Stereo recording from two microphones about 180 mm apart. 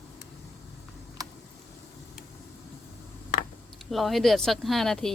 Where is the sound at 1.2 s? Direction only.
20° right (ahead or behind).